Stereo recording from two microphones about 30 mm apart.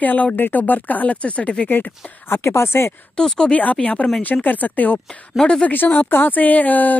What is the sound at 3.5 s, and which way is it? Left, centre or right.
Speech, left.